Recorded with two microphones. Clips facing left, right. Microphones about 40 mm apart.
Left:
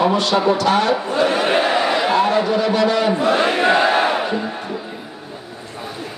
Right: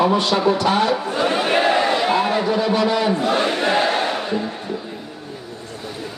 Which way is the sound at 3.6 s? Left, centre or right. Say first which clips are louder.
Left 4 dB; centre.